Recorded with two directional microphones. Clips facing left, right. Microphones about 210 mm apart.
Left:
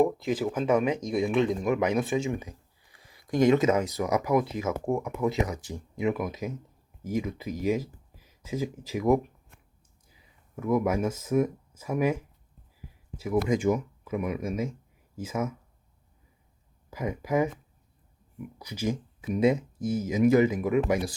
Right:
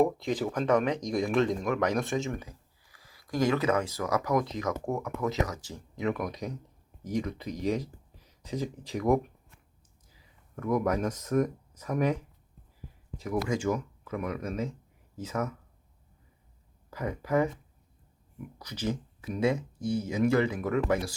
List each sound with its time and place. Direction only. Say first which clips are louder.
0.0 s speech: left 2 dB; 5° left (ahead or behind)
2.4 s speech: left 3 dB; 20° left (ahead or behind)
13.1 s speech: left 4 dB; 5° left (ahead or behind)
16.9 s speech: left 1 dB; 10° left (ahead or behind)